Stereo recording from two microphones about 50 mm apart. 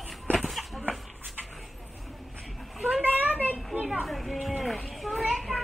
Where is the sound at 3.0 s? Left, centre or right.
Right.